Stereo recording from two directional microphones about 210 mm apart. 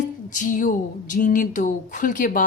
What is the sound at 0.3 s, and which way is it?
Speech, 40° left (ahead or behind).